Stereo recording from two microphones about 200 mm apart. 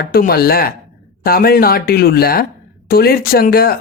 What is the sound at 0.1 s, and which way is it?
Speech, 50° left (ahead or behind).